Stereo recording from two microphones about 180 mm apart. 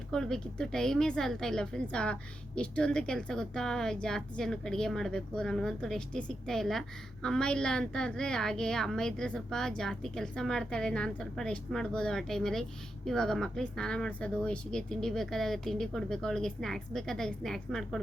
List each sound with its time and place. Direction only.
0.1 s a woman's voice: 5° left (ahead or behind)